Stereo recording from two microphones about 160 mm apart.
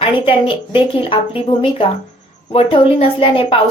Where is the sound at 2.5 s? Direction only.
35° left (ahead or behind).